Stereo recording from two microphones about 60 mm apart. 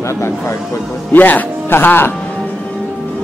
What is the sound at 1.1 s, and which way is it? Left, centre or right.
Speech, left.